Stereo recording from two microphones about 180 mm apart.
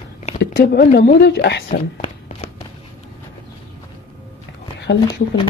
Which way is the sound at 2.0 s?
40° left (ahead or behind).